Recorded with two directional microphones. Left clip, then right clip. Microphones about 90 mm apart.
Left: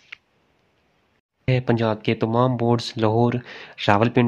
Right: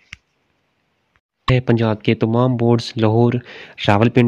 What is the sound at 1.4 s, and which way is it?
Speech, 40° right (ahead or behind).